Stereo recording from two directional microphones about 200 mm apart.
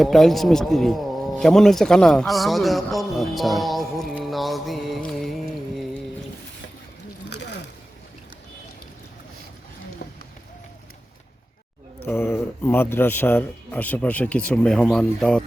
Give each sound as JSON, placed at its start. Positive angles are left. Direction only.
{"t": 0.0, "sound": "speech", "side_deg": 0}
{"t": 7.3, "sound": "a sound", "side_deg": 55}
{"t": 10.0, "sound": "run", "side_deg": 50}
{"t": 12.0, "sound": "speech", "side_deg": 10}